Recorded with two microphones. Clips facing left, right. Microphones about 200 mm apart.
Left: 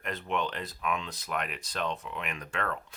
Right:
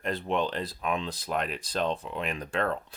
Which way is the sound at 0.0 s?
30° right (ahead or behind).